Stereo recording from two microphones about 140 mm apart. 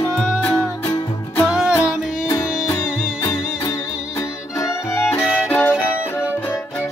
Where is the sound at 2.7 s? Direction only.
20° left (ahead or behind).